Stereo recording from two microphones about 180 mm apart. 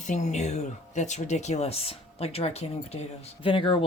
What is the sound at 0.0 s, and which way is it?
Speech, 40° left (ahead or behind).